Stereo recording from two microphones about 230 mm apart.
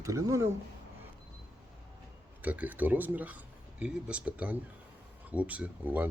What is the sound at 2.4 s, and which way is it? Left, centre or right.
Speech, centre.